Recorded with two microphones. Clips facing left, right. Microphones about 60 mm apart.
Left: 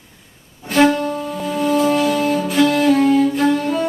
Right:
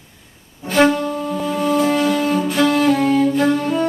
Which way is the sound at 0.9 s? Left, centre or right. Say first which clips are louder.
Even; centre.